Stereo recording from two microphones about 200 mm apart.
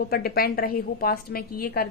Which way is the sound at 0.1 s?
50° left (ahead or behind).